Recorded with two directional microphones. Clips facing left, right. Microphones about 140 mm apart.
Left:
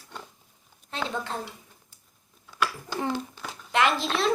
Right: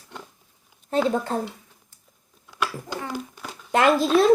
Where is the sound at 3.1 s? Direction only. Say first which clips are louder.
Left 1 dB; centre (ahead or behind).